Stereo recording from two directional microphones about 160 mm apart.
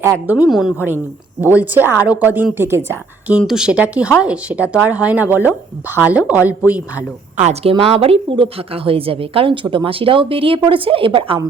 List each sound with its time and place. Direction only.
0.3 s a woman's voice: 5° right (ahead or behind)
7.3 s a woman's voice: 40° right (ahead or behind)